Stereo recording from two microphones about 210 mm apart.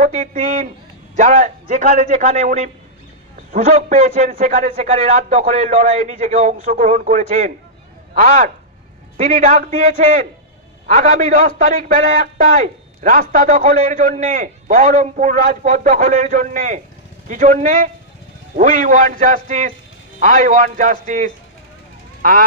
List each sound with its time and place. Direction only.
0.0 s a man's voice: 35° right (ahead or behind)